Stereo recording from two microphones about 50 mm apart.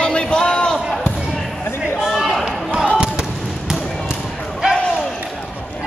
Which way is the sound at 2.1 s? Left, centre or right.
Centre.